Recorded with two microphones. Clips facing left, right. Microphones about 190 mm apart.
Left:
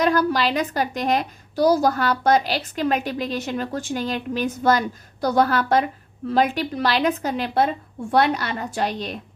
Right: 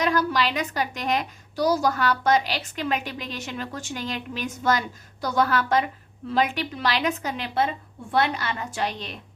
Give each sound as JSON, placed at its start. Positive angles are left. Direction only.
{"t": 0.0, "sound": "a woman's voice", "side_deg": 40}